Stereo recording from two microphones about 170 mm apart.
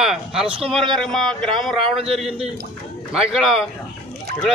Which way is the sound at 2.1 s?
5° right (ahead or behind).